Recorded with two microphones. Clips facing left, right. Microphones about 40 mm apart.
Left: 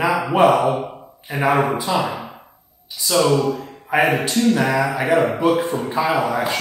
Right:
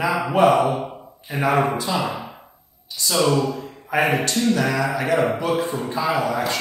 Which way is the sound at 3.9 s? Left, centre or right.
Centre.